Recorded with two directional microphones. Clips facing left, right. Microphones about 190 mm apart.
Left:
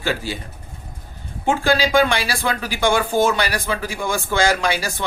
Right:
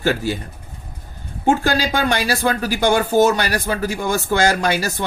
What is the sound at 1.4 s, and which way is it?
Speech, 45° right (ahead or behind).